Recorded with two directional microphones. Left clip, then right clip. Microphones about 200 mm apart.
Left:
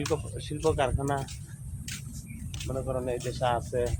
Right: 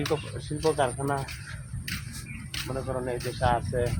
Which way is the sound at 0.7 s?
10° right (ahead or behind).